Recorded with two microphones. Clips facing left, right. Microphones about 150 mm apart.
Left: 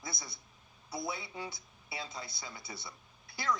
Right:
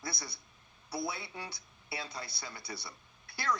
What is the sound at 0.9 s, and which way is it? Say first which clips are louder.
A man's voice: right 1 dB; 20° left (ahead or behind).